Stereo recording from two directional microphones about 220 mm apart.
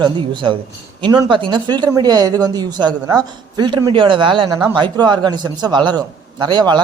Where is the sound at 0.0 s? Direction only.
20° right (ahead or behind).